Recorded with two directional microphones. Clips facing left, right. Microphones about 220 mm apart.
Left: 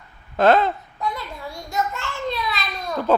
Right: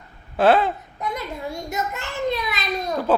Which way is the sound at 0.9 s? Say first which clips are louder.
Even; 20° right (ahead or behind).